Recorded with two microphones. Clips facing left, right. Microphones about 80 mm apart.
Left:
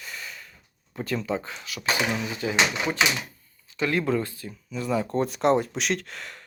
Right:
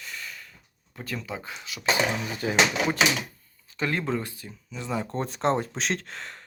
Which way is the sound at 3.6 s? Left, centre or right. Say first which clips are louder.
Left 2 dB; right.